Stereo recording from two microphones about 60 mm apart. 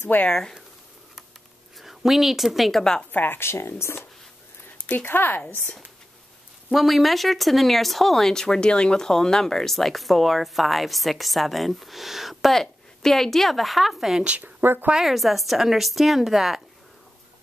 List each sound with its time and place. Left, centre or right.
0.0 s speech: left
0.3 s speech: centre
1.8 s a woman's voice: centre
2.8 s speech: centre
3.1 s speech: left
4.8 s speech: left
6.7 s speech: centre
14.2 s a woman's voice: right
14.6 s speech: right
14.9 s speech: centre